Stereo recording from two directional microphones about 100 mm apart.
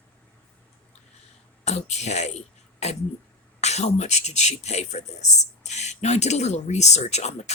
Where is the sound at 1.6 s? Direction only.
90° left.